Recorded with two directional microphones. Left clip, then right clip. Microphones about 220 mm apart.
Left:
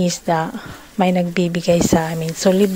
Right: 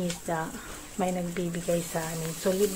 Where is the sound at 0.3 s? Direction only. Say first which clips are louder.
Left 13 dB; 45° left (ahead or behind).